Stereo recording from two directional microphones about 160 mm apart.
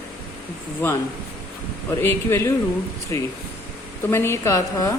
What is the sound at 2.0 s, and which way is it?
A woman's voice, 15° left (ahead or behind).